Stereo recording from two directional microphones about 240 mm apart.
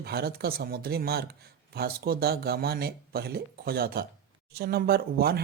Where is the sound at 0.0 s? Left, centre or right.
Right.